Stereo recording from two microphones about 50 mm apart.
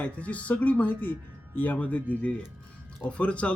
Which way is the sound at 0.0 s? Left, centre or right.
Left.